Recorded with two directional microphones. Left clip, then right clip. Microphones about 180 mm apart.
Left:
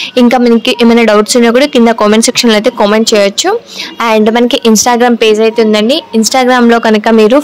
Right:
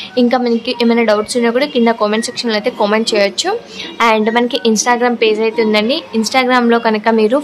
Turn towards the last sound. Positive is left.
turn(degrees=40)  # may be behind; listen again after turning